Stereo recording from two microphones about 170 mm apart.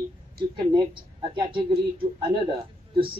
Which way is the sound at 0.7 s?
30° right (ahead or behind).